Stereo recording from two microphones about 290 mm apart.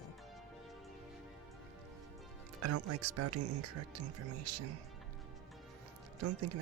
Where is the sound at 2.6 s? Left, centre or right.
Right.